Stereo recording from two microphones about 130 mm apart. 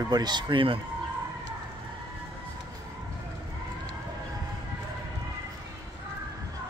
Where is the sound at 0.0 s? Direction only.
30° right (ahead or behind).